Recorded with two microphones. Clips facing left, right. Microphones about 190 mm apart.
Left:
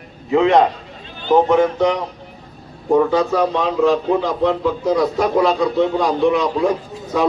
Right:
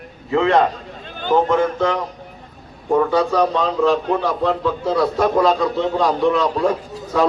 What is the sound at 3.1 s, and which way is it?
A man's voice, 15° left (ahead or behind).